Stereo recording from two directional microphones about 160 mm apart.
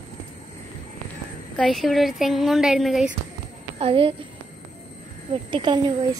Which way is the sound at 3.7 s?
35° right (ahead or behind).